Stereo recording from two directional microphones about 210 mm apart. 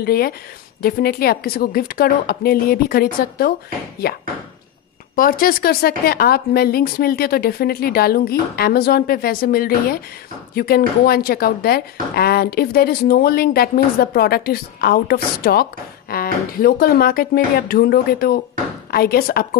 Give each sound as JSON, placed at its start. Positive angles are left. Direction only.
{"t": 0.0, "sound": "a woman's voice", "side_deg": 45}
{"t": 5.1, "sound": "a woman's voice", "side_deg": 45}